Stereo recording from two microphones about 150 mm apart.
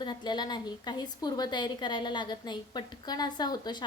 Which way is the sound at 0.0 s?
30° left (ahead or behind).